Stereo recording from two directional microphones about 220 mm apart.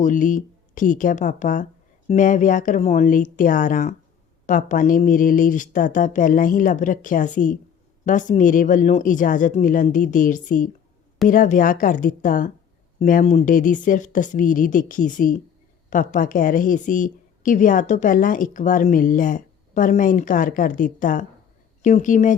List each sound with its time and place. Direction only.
0.0 s a woman's voice: 35° left (ahead or behind)